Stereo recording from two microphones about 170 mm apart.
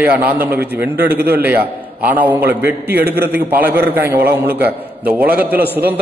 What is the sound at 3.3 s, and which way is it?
A man's voice, 10° right (ahead or behind).